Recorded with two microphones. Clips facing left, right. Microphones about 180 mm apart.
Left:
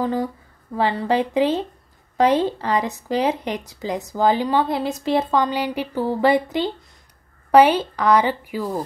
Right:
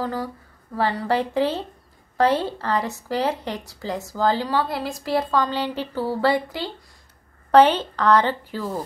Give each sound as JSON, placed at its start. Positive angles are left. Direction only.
{"t": 0.0, "sound": "speech", "side_deg": 20}